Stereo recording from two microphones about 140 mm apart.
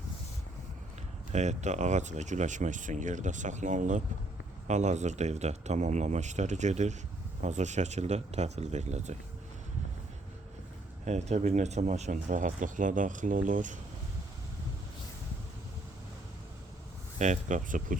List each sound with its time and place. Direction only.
1.3 s speech: 55° right (ahead or behind)
11.0 s speech: 55° right (ahead or behind)
17.2 s speech: 55° right (ahead or behind)